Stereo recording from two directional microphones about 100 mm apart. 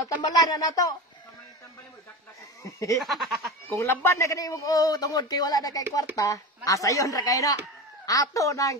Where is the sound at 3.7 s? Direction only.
25° left (ahead or behind).